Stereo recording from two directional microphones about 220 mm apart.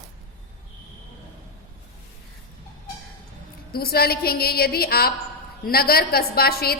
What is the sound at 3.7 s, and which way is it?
A woman's voice, 45° left (ahead or behind).